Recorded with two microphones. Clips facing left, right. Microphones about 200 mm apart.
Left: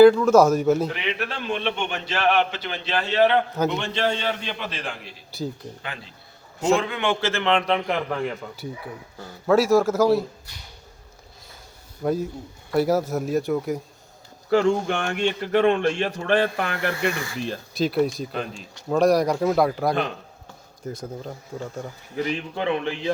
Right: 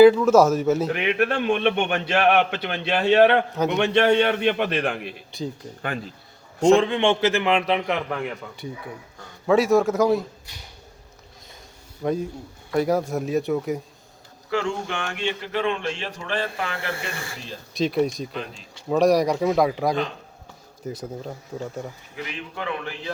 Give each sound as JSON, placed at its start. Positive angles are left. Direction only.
{"t": 0.0, "sound": "speech", "side_deg": -5}
{"t": 0.9, "sound": "a man's voice", "side_deg": -50}
{"t": 5.3, "sound": "speech", "side_deg": 0}
{"t": 5.8, "sound": "speech", "side_deg": -45}
{"t": 6.7, "sound": "a man's voice", "side_deg": -30}
{"t": 12.0, "sound": "speech", "side_deg": 5}
{"t": 14.7, "sound": "a man's voice", "side_deg": 45}
{"t": 17.7, "sound": "speech", "side_deg": 0}
{"t": 22.1, "sound": "a man's voice", "side_deg": 30}